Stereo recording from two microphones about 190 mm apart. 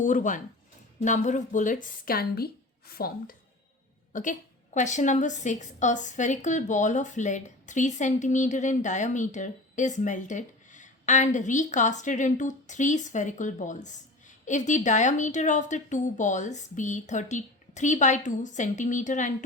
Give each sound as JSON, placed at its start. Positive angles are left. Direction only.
{"t": 0.0, "sound": "a woman's voice", "side_deg": 40}